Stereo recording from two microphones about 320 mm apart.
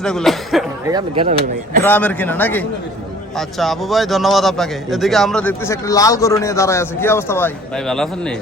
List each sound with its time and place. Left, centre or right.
0.0 s a man's voice: centre
0.9 s speech: centre
1.8 s a man's voice: centre